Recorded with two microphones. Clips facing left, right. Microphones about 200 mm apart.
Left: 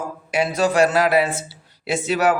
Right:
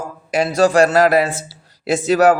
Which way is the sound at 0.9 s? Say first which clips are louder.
Right 4 dB; 40° right (ahead or behind).